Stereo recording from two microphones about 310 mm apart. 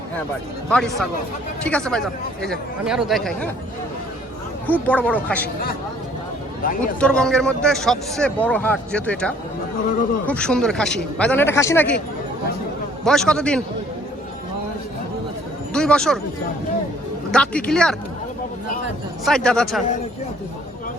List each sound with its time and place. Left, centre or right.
0.7 s a man's voice: centre
4.6 s a man's voice: centre
6.6 s speech: left
7.0 s a man's voice: centre
13.1 s a man's voice: centre
15.7 s a man's voice: centre
17.3 s a man's voice: centre
19.2 s a man's voice: centre